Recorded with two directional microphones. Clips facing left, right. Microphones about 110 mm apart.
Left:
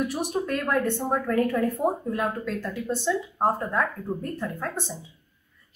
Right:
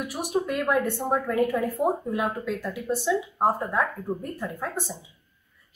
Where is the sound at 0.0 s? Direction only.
10° right (ahead or behind).